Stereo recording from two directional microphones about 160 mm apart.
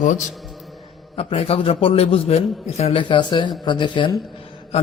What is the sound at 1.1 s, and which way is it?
A man's voice, 40° left (ahead or behind).